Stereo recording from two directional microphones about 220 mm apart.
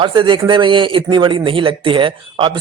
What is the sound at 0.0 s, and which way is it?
A man's voice, 20° right (ahead or behind).